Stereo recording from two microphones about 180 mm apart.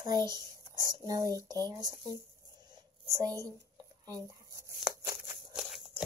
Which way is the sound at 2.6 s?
20° right (ahead or behind).